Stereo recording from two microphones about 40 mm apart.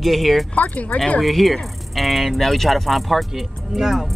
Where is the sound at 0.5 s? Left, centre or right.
Left.